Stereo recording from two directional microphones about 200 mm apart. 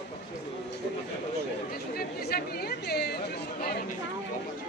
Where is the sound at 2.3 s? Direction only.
50° left (ahead or behind).